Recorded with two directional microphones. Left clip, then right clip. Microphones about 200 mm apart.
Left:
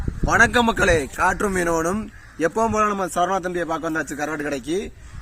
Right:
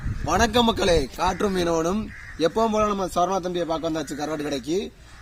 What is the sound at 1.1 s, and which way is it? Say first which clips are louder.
A man's voice: left 3 dB; 10° left (ahead or behind).